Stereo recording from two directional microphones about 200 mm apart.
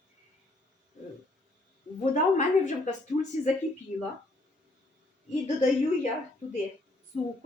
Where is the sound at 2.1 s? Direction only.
40° left (ahead or behind).